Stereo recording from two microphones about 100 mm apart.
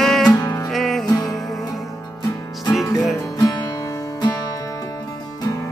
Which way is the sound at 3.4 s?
40° left (ahead or behind).